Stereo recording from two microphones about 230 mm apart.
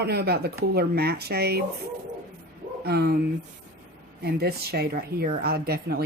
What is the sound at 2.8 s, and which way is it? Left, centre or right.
Speech, right.